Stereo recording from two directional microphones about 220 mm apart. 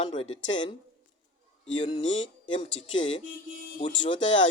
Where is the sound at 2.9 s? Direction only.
60° left (ahead or behind).